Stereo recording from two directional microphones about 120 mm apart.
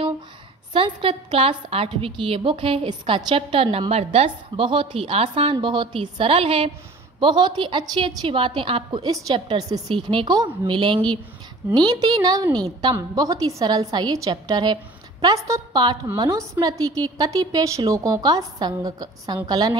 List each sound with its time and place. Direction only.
0.7 s a woman's voice: 45° right (ahead or behind)
7.2 s a woman's voice: 40° right (ahead or behind)
15.3 s a woman's voice: 25° right (ahead or behind)
15.7 s a woman's voice: 40° right (ahead or behind)